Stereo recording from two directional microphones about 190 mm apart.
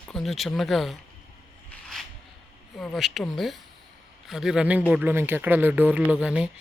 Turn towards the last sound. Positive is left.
turn(degrees=-5)  # may be behind; listen again after turning